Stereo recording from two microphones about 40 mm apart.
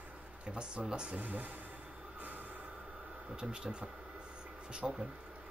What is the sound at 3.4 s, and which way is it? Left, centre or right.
Speech, right.